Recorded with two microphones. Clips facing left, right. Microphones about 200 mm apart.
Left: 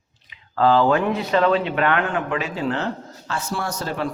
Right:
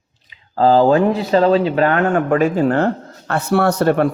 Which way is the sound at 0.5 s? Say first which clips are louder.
Right 5 dB; 35° right (ahead or behind).